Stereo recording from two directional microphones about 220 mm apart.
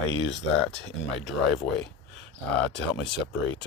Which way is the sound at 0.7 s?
50° left (ahead or behind).